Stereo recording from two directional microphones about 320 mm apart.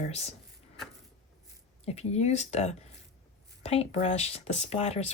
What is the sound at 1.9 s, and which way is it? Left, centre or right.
Speech, centre.